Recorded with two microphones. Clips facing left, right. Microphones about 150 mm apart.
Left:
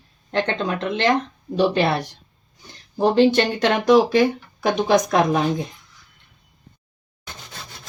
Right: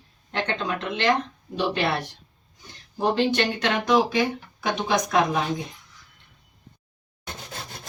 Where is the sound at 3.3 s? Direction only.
40° left (ahead or behind).